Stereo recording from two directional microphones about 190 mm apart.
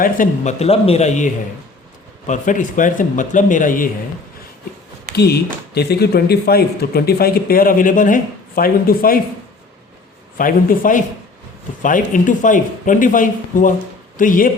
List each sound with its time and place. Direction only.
0.0 s speech: 40° left (ahead or behind)
5.1 s speech: 60° left (ahead or behind)
10.3 s speech: 45° left (ahead or behind)